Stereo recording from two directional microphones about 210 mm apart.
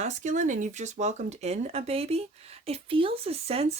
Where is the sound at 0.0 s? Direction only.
35° right (ahead or behind).